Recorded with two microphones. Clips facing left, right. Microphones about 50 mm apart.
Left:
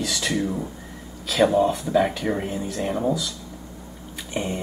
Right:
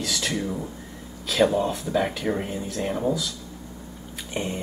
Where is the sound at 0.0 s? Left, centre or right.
Centre.